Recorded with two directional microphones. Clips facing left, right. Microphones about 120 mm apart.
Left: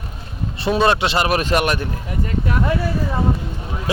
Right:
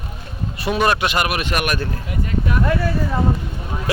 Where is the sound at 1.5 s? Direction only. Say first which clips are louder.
Left 3 dB; 25° left (ahead or behind).